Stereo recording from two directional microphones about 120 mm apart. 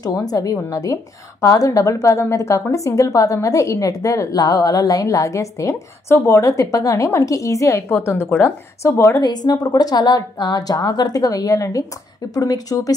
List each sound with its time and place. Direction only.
0.0 s a woman's voice: 30° left (ahead or behind)
9.2 s a woman's voice: 35° left (ahead or behind)